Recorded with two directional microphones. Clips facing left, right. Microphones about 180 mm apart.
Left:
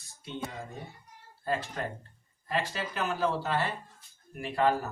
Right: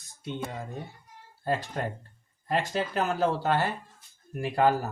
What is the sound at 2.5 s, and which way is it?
Speech, 50° right (ahead or behind).